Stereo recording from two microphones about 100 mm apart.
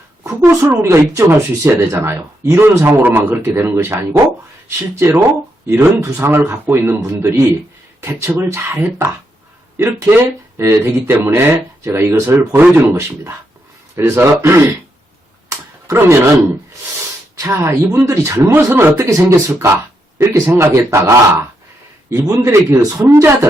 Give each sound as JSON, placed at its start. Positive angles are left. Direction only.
{"t": 0.3, "sound": "speech", "side_deg": -25}
{"t": 15.4, "sound": "a sound", "side_deg": -30}
{"t": 17.3, "sound": "speech", "side_deg": -30}
{"t": 23.0, "sound": "speech", "side_deg": -25}